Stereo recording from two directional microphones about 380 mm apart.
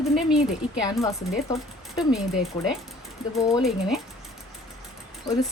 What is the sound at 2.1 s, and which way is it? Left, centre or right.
Speech, centre.